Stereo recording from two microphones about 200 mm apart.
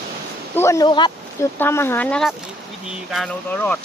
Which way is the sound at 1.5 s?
10° left (ahead or behind).